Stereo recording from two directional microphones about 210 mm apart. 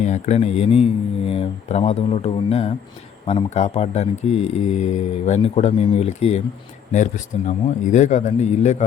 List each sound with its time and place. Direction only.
0.0 s speech: 35° left (ahead or behind)